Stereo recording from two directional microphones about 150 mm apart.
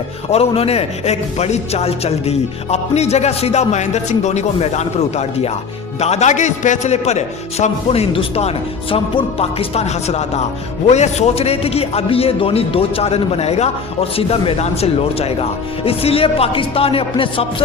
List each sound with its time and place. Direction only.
0.3 s a man's voice: 40° left (ahead or behind)